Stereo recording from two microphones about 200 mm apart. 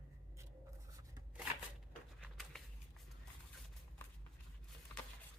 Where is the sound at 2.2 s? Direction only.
Centre (ahead or behind).